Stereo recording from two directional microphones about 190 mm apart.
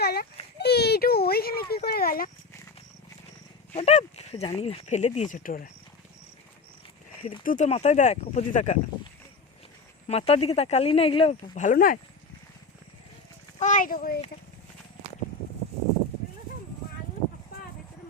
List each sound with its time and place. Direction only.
0.0 s a sound: 55° left (ahead or behind)
3.8 s speech: 35° left (ahead or behind)
7.2 s speech: 30° left (ahead or behind)
7.4 s speech: 40° left (ahead or behind)
10.1 s speech: 30° left (ahead or behind)
13.6 s speech: 40° left (ahead or behind)